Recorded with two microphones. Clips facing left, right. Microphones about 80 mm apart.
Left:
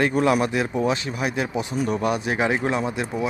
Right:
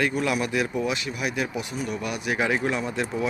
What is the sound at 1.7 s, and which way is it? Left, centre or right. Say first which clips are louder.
Speech: left 9 dB; left.